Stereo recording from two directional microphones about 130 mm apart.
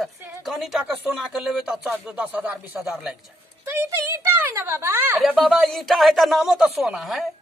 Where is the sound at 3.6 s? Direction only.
15° right (ahead or behind).